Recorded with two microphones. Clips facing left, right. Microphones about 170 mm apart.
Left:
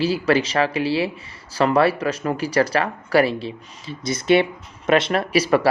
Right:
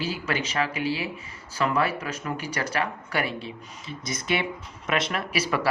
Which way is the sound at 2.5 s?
90° left.